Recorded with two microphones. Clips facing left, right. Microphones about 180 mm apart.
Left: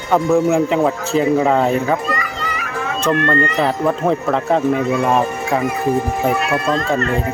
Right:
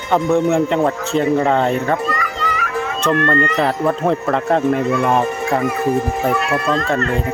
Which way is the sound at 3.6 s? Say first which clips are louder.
Even; centre (ahead or behind).